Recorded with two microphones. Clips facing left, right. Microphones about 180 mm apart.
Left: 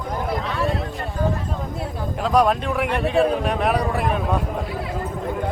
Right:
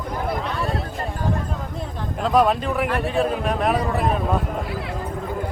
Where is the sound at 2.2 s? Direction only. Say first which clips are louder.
Even; centre (ahead or behind).